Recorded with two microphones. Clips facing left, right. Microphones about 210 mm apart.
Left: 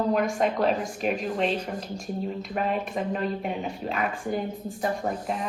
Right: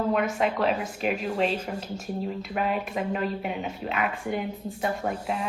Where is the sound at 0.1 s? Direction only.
40° left (ahead or behind).